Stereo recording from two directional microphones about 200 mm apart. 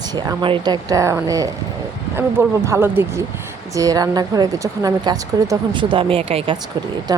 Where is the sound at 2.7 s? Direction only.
10° right (ahead or behind); by 6.6 s 25° right (ahead or behind).